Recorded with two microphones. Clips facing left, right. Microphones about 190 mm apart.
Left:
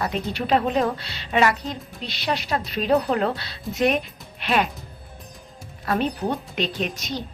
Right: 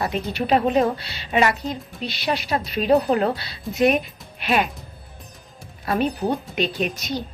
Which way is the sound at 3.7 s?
Centre (ahead or behind).